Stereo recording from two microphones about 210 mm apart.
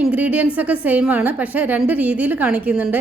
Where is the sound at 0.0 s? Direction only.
5° right (ahead or behind).